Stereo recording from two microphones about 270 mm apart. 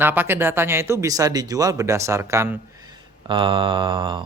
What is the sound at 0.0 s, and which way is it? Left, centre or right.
Speech, centre.